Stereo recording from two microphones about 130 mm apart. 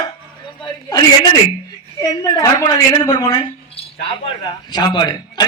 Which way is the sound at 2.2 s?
30° left (ahead or behind).